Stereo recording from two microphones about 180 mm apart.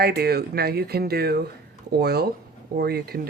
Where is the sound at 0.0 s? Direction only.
60° right (ahead or behind).